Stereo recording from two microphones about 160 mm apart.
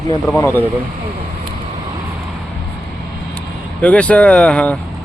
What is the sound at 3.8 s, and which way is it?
Speech, 10° left (ahead or behind).